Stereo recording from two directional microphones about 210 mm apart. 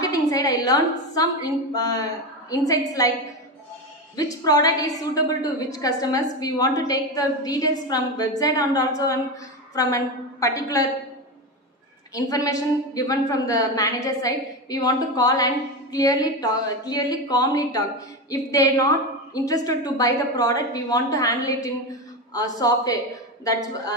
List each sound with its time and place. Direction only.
0.0 s a sound: 15° left (ahead or behind)
1.7 s a woman's voice: 15° left (ahead or behind)
4.2 s a woman's voice: 15° left (ahead or behind)
12.1 s a woman's voice: 15° left (ahead or behind)